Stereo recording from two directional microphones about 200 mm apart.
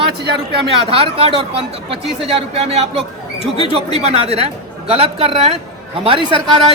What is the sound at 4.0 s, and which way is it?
A woman's voice, 30° right (ahead or behind).